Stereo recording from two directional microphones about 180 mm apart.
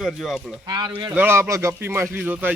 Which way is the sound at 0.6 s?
20° right (ahead or behind).